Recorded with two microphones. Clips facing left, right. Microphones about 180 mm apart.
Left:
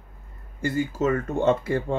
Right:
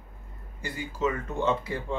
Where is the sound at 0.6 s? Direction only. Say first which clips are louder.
Left 6 dB; 45° left (ahead or behind).